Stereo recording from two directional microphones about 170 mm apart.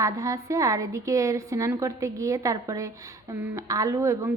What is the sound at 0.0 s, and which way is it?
Speech, 20° right (ahead or behind).